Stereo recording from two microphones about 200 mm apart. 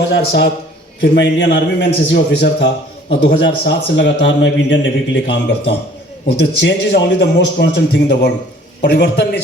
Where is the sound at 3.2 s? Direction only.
55° left (ahead or behind).